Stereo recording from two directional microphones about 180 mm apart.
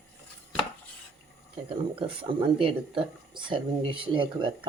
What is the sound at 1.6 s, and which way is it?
Speech, 30° right (ahead or behind).